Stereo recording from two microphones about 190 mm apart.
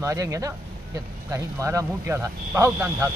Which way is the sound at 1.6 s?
15° right (ahead or behind).